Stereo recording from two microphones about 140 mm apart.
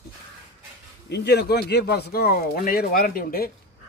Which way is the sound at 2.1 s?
90° left.